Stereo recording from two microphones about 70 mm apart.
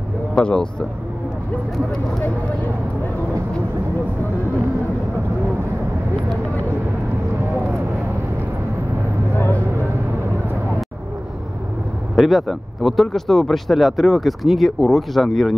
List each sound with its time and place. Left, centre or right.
0.3 s speech: centre
1.9 s speech: centre
12.2 s speech: centre